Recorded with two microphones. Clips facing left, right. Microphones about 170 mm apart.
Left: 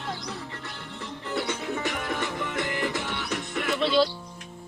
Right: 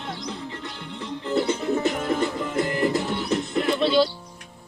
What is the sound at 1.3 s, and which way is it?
Music, 35° right (ahead or behind).